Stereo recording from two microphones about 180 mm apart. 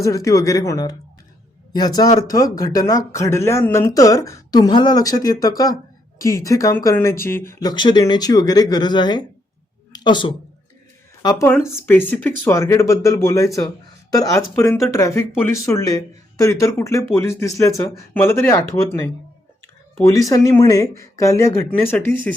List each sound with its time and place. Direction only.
0.0 s speech: 20° left (ahead or behind)
20.2 s speech: 20° left (ahead or behind)